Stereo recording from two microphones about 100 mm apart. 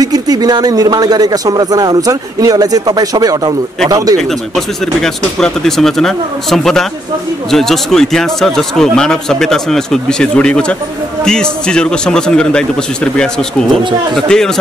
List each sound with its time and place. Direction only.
0.0 s speech: 40° right (ahead or behind)
4.2 s a man's voice: 5° left (ahead or behind)